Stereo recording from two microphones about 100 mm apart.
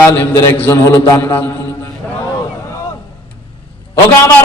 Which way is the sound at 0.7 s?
30° left (ahead or behind).